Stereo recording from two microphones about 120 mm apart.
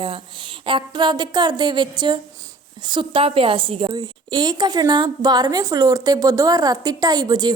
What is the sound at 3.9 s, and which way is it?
A woman's voice, 35° right (ahead or behind).